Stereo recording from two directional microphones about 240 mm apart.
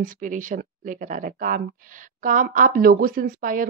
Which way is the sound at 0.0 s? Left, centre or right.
Right.